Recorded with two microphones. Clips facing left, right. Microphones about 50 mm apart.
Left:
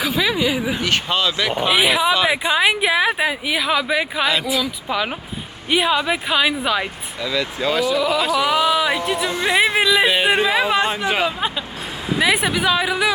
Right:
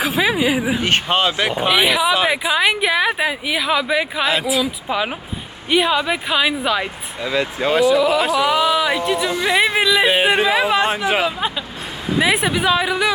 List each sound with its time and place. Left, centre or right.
0.3 s a sound: right
0.7 s speech: right
1.7 s speech: centre
5.7 s speech: centre
7.2 s speech: right
7.9 s speech: centre